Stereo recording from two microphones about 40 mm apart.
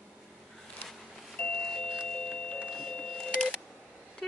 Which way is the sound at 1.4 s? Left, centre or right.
Left.